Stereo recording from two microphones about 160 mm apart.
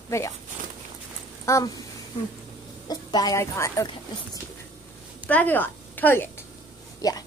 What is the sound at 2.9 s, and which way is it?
Speech, 25° left (ahead or behind).